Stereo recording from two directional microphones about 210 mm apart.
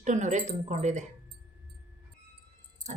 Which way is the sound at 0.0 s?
35° right (ahead or behind).